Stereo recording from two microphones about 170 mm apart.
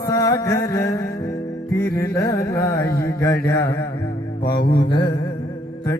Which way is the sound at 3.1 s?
20° left (ahead or behind).